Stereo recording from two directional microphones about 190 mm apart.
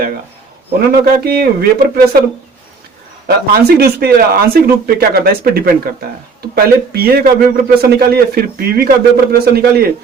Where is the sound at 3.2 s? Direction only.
55° right (ahead or behind).